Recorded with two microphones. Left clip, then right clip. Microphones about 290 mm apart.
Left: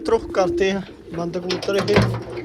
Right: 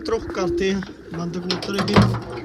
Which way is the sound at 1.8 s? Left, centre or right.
Right.